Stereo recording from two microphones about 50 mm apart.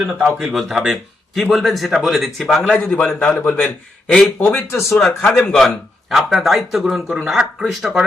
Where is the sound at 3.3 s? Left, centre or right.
Left.